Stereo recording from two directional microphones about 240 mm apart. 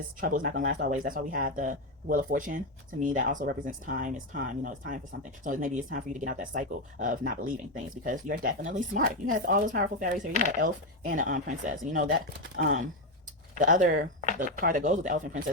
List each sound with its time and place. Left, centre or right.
0.2 s speech: right